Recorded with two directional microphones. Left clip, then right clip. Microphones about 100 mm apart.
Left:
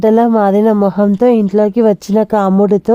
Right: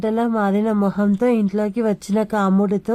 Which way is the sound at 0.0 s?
70° left (ahead or behind).